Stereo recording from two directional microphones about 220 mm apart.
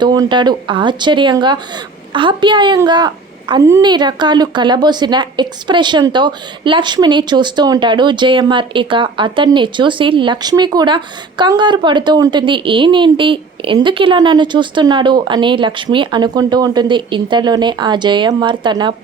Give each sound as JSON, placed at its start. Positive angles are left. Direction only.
{"t": 0.0, "sound": "a woman's voice", "side_deg": -20}